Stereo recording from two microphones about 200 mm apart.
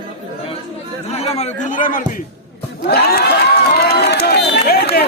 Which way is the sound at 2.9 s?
50° left (ahead or behind).